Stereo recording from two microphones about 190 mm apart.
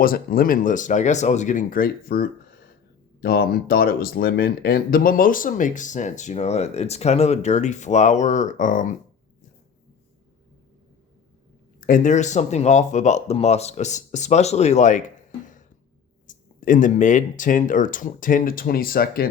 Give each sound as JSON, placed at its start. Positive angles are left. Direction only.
{"t": 0.0, "sound": "speech", "side_deg": 50}
{"t": 11.8, "sound": "speech", "side_deg": 45}